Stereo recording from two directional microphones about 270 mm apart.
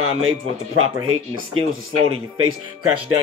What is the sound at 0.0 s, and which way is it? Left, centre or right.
Music, right.